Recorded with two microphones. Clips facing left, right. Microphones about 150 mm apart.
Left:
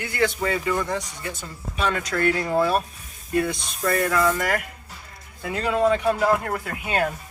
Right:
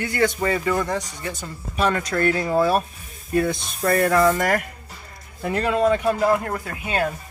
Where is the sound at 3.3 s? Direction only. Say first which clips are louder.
Right 2 dB; 40° right (ahead or behind).